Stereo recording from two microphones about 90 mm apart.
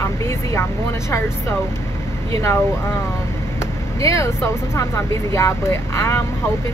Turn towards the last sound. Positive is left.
turn(degrees=30)  # may be behind; listen again after turning